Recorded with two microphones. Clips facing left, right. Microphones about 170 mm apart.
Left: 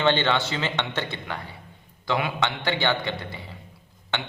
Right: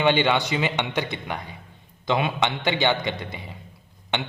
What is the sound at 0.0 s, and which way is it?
A man's voice, 15° right (ahead or behind).